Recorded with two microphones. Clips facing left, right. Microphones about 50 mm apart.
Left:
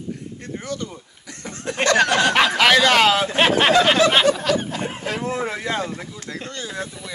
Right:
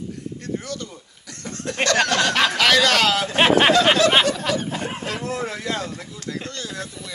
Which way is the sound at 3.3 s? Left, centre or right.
Centre.